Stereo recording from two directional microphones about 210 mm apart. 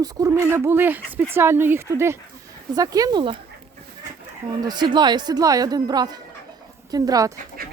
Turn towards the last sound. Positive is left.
turn(degrees=-15)  # may be behind; listen again after turning